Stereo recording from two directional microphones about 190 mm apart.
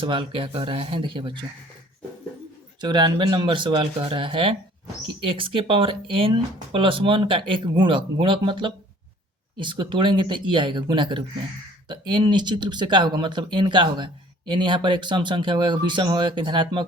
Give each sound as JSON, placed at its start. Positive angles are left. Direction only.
{"t": 0.0, "sound": "speech", "side_deg": -25}
{"t": 2.8, "sound": "speech", "side_deg": -25}